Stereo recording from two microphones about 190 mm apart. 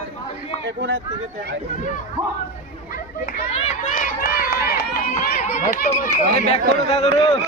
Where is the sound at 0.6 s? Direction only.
70° right (ahead or behind).